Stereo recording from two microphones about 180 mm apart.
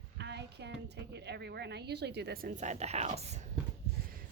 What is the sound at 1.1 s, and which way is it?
Speech, 70° right (ahead or behind).